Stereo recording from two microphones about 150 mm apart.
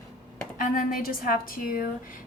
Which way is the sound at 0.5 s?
65° left (ahead or behind).